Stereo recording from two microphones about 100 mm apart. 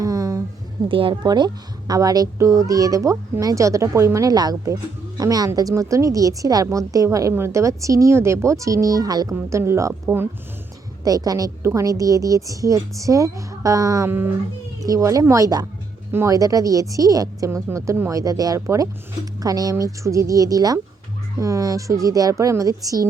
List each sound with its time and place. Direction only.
0.0 s a sound: 35° right (ahead or behind)
0.9 s speech: 60° right (ahead or behind)
1.2 s speech: 45° right (ahead or behind)
9.3 s speech: 30° right (ahead or behind)
11.0 s speech: 40° right (ahead or behind)